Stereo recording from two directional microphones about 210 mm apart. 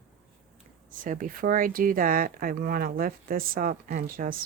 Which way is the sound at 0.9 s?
40° right (ahead or behind).